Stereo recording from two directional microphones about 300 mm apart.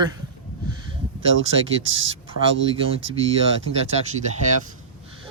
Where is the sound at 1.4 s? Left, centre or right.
Right.